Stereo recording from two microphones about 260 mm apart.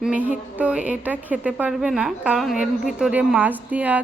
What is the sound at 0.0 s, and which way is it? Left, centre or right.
Speech, centre.